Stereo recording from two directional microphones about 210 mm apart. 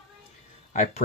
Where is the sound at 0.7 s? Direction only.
35° left (ahead or behind).